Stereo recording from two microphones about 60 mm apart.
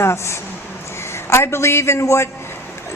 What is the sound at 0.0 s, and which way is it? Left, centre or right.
A woman's voice, left.